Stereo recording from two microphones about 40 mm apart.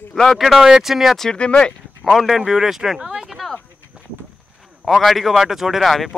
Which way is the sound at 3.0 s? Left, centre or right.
Right.